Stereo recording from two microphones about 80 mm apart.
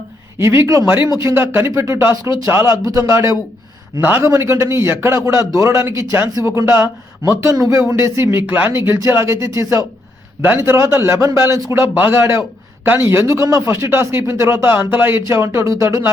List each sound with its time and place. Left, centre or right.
0.3 s speech: right
4.0 s a man's voice: right